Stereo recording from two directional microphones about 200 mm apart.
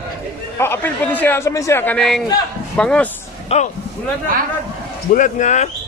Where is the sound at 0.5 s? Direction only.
10° left (ahead or behind).